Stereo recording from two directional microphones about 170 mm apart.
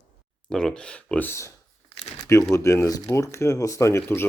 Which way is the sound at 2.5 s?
15° left (ahead or behind).